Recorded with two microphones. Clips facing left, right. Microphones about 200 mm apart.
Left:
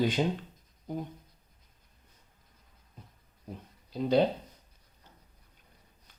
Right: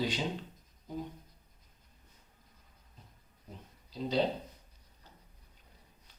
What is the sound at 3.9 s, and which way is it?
Speech, 55° left (ahead or behind).